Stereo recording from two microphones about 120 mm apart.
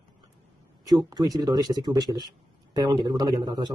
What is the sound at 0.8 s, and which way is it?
Speech, 30° right (ahead or behind).